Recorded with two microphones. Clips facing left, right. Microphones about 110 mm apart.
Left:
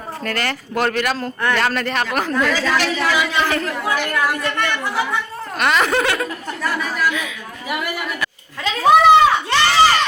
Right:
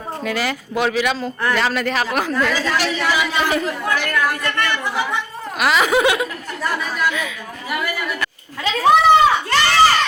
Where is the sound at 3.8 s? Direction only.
10° left (ahead or behind).